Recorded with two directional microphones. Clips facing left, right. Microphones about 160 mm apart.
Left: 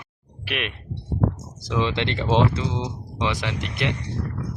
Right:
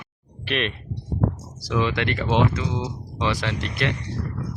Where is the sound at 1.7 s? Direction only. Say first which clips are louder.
Right 1 dB; 25° left (ahead or behind).